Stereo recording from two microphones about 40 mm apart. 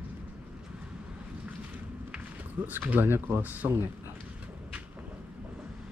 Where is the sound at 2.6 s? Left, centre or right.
Right.